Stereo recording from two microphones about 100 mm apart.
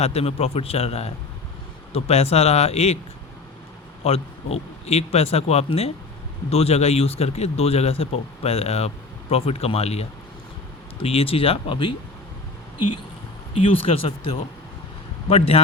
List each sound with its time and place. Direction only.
0.0 s speech: 90° left
4.0 s speech: 80° left
11.0 s speech: 75° left (ahead or behind); by 11.9 s 55° left (ahead or behind)
13.6 s speech: 65° left (ahead or behind)